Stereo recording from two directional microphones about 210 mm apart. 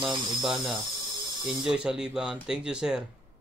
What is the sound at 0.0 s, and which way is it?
A man's voice, centre (ahead or behind).